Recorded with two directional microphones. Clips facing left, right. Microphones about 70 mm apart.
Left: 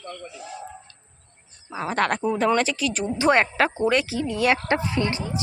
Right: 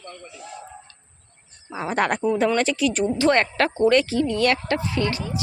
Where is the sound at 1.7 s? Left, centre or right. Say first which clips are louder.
Right 1 dB; centre.